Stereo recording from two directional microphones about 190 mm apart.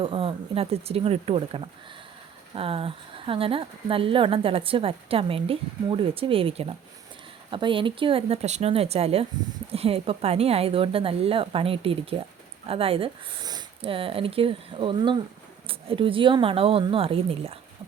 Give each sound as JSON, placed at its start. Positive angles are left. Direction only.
{"t": 0.0, "sound": "speech", "side_deg": -30}